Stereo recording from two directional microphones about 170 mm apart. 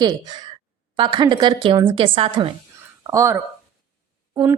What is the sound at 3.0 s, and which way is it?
Speech, 15° right (ahead or behind).